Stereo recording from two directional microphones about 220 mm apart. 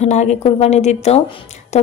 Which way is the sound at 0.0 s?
30° left (ahead or behind).